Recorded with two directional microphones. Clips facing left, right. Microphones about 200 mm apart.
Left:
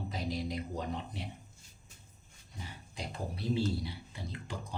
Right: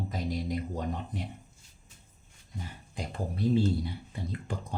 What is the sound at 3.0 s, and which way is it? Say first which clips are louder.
Speech: right 6 dB; 50° right (ahead or behind).